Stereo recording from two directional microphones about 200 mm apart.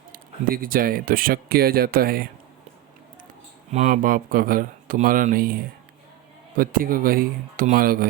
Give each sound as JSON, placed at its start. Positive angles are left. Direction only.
{"t": 0.1, "sound": "speech", "side_deg": -45}
{"t": 3.7, "sound": "speech", "side_deg": -35}